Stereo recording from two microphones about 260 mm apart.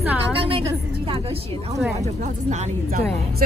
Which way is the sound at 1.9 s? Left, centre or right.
Right.